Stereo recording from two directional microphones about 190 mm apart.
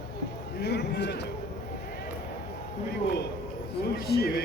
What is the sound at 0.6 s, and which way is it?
Speech, 60° left (ahead or behind).